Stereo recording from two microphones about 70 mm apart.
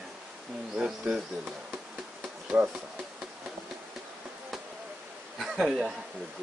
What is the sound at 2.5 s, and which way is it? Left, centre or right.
Speech, right.